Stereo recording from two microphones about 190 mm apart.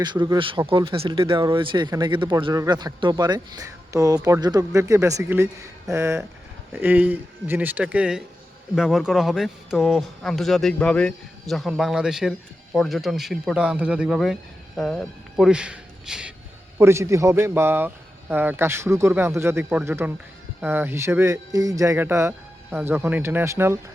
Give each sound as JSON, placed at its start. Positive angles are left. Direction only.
{"t": 0.0, "sound": "a man's voice", "side_deg": -25}